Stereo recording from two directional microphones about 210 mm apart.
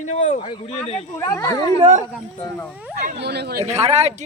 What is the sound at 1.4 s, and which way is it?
Music, 20° left (ahead or behind).